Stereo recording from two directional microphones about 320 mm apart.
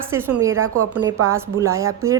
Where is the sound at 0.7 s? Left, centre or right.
Right.